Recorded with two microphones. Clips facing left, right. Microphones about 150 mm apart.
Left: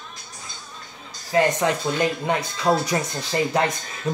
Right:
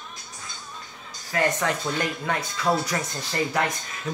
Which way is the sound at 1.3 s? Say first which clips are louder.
Left 5 dB; 20° left (ahead or behind).